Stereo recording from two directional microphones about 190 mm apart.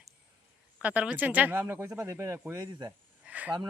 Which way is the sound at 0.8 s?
5° right (ahead or behind).